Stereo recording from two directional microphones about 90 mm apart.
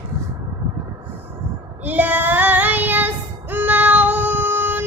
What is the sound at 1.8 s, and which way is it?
Child singing, 20° right (ahead or behind).